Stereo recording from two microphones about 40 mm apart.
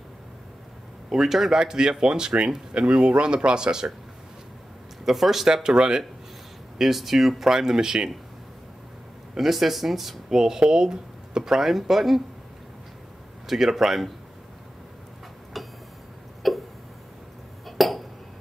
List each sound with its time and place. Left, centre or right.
1.1 s speech: centre
1.6 s speech: centre
5.0 s speech: centre
6.8 s speech: centre
9.3 s speech: centre
10.4 s speech: centre
13.5 s speech: centre
15.5 s a sound: centre
16.4 s hiccup: centre
17.6 s a sound: centre